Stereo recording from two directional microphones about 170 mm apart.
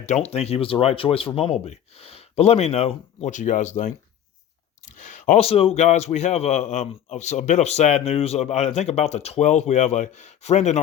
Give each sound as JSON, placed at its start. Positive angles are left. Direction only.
{"t": 0.0, "sound": "a man's voice", "side_deg": 40}